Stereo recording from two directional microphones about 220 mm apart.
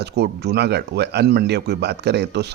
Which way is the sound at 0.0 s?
50° right (ahead or behind).